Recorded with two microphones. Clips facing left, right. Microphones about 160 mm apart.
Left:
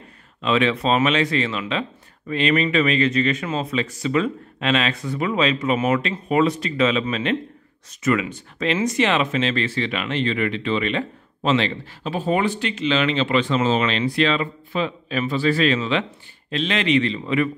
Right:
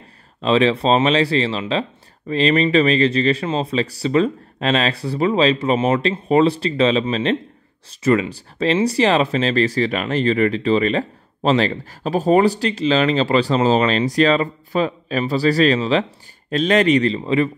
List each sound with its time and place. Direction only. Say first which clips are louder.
0.4 s speech: right 4 dB; 30° right (ahead or behind)